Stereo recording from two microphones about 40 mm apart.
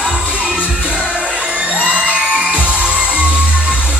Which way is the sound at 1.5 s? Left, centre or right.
Right.